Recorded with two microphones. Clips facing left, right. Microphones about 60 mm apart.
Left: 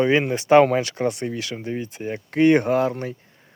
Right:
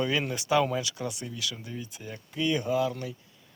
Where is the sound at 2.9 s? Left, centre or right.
Left.